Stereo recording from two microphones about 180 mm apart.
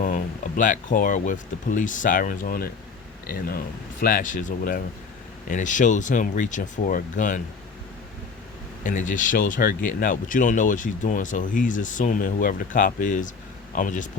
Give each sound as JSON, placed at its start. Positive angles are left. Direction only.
{"t": 0.0, "sound": "speech", "side_deg": 45}
{"t": 8.8, "sound": "speech", "side_deg": 45}